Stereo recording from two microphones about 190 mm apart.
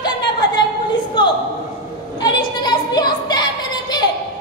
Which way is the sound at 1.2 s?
25° left (ahead or behind).